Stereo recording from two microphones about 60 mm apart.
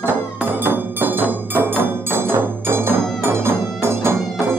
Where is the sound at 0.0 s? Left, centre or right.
Right.